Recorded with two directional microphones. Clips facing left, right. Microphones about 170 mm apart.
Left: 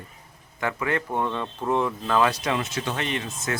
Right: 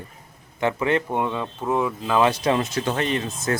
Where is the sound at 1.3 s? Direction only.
5° right (ahead or behind).